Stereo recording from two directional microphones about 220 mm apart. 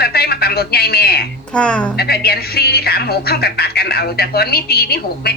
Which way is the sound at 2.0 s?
45° left (ahead or behind).